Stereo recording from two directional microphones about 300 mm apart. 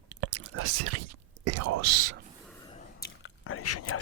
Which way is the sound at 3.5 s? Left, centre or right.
Left.